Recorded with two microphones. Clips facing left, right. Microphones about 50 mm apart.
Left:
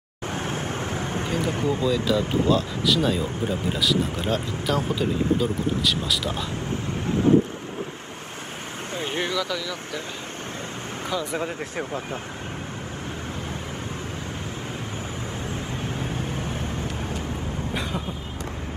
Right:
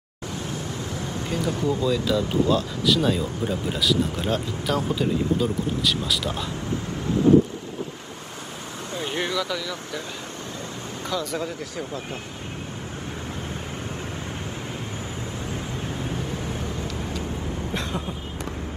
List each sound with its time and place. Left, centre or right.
0.3 s vehicle: left
2.1 s speech: centre
8.9 s vehicle: left
11.1 s speech: centre
11.4 s speech: left
16.2 s vehicle: left